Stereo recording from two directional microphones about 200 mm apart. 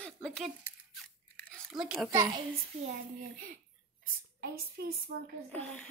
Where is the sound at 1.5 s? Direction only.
Centre (ahead or behind).